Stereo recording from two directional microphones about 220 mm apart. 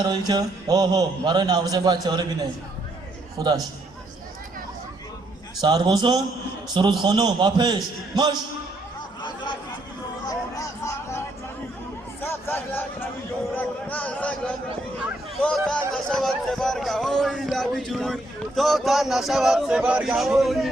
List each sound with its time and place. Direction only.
0.0 s a man's voice: 20° right (ahead or behind)
3.3 s a man's voice: 15° right (ahead or behind)
5.5 s a man's voice: 20° right (ahead or behind)
10.2 s music: 15° left (ahead or behind)
12.2 s hubbub: 10° left (ahead or behind)
13.6 s a sound: 5° left (ahead or behind)
15.4 s music: centre (ahead or behind)